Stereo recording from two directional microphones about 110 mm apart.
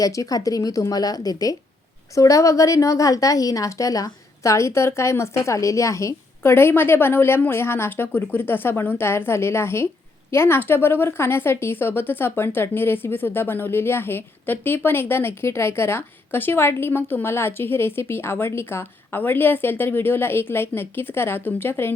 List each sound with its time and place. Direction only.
0.0 s a woman's voice: 30° left (ahead or behind)